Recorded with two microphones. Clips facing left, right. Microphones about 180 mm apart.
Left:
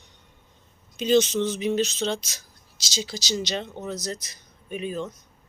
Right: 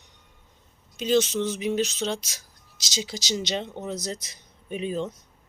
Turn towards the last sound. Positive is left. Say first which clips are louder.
# right 1 dB
turn(degrees=-25)  # may be behind; listen again after turning